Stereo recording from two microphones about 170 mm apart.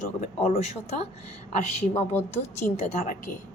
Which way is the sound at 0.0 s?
45° left (ahead or behind).